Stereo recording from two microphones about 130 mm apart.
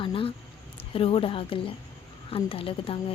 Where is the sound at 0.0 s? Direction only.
45° left (ahead or behind).